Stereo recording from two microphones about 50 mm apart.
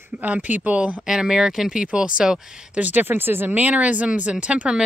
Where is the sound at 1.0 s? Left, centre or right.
Centre.